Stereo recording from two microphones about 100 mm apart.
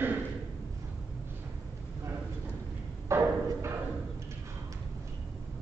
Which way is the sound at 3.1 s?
25° right (ahead or behind).